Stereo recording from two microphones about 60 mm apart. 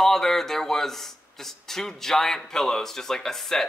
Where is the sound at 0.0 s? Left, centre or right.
Centre.